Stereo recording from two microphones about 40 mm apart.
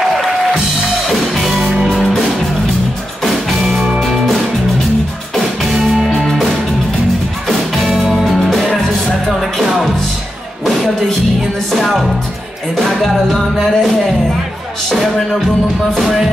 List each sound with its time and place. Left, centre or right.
1.3 s music: centre
1.6 s music: right
5.3 s music: centre
14.9 s music: centre